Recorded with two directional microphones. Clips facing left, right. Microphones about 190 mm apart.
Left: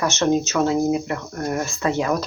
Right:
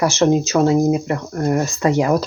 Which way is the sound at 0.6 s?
25° right (ahead or behind).